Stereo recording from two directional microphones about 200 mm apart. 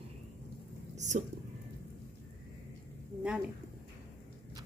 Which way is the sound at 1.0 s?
35° right (ahead or behind).